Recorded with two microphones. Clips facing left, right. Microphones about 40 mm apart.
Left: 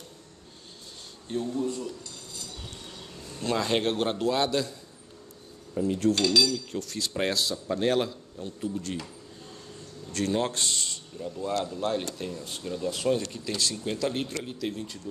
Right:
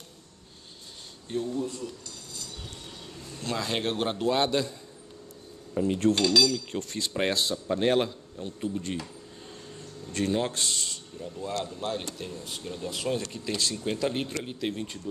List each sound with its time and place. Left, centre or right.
1.3 s speech: centre
3.2 s speech: centre
4.3 s speech: centre
5.8 s cutlery: right
6.2 s speech: centre
6.7 s cutlery: right
7.0 s speech: centre
9.8 s a sound: centre
10.3 s speech: centre
12.6 s speech: centre
12.9 s speech: centre
14.6 s speech: right